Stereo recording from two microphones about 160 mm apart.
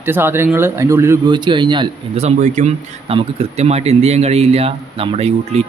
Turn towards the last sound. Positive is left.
turn(degrees=-40)  # may be behind; listen again after turning